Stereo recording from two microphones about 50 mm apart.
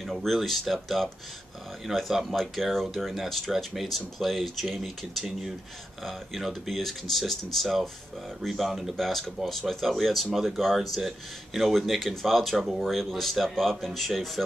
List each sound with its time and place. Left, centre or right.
0.0 s speech: centre